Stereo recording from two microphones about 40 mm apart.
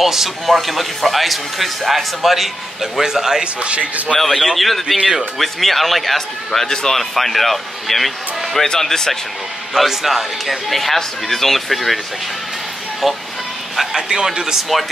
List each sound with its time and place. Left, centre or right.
0.0 s a man's voice: centre
3.6 s a man's voice: right
4.2 s a man's voice: centre
8.6 s speech: centre
9.8 s a man's voice: centre
13.0 s a man's voice: centre
13.9 s a man's voice: centre